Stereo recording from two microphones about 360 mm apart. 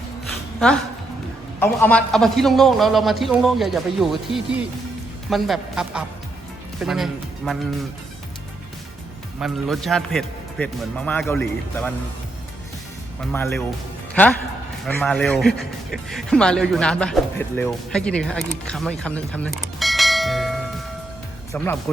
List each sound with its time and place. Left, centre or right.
1.5 s speech: centre
9.4 s speech: centre
14.8 s speech: centre